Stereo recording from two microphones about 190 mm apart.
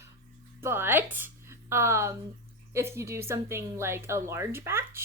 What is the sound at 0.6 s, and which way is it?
A woman's voice, 10° right (ahead or behind).